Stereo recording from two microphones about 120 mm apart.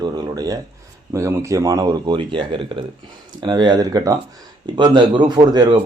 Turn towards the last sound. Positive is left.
turn(degrees=-40)  # may be behind; listen again after turning